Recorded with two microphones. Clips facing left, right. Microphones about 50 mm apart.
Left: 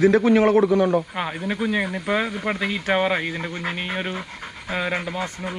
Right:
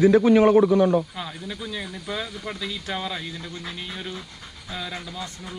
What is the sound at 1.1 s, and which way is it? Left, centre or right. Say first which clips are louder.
Speech: left 8 dB; left.